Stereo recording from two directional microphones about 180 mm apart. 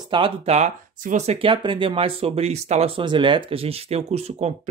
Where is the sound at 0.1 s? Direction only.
30° right (ahead or behind).